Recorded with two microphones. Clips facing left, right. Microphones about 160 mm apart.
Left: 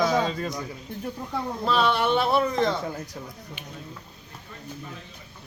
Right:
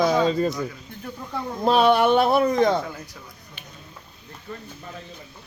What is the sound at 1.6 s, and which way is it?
Speech, 45° right (ahead or behind).